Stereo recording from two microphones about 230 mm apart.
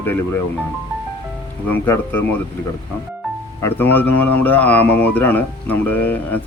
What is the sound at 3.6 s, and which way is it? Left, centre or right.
A man's voice, centre.